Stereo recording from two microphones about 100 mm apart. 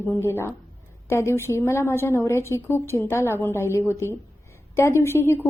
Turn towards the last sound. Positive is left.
turn(degrees=25)  # may be behind; listen again after turning